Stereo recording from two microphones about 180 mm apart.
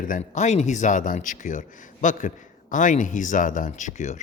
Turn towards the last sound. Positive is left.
turn(degrees=40)  # may be behind; listen again after turning